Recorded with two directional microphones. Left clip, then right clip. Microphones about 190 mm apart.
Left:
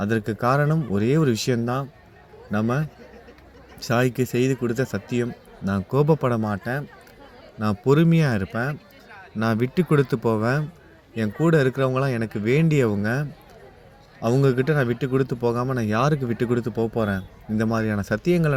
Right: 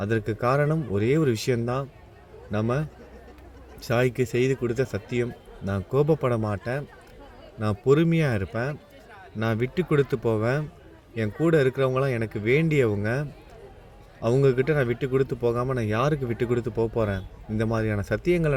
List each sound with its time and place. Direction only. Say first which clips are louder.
0.0 s speech: left 2 dB; 35° left (ahead or behind)